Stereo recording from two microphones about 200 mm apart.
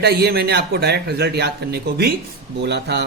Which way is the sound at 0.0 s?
55° right (ahead or behind).